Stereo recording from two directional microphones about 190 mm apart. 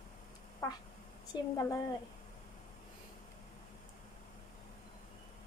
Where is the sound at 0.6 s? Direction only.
20° left (ahead or behind).